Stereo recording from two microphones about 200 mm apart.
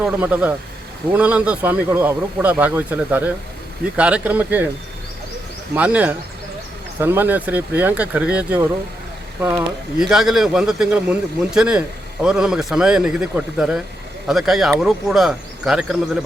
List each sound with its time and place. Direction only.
0.0 s speech: 5° right (ahead or behind)
5.7 s speech: 5° right (ahead or behind)